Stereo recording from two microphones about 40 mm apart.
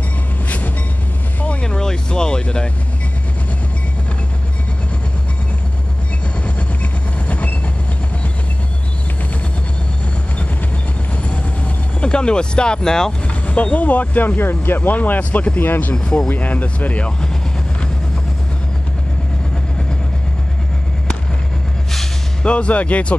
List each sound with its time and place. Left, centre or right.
1.6 s vehicle: centre
6.4 s train: left
12.0 s speech: left
13.5 s speech: left
15.6 s speech: left
16.0 s speech: left
16.3 s speech: left
22.4 s speech: left